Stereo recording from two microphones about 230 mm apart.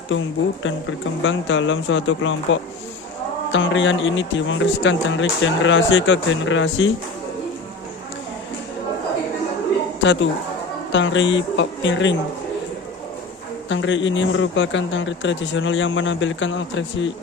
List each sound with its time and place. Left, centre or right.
0.1 s speech: left
10.0 s speech: left
13.7 s speech: left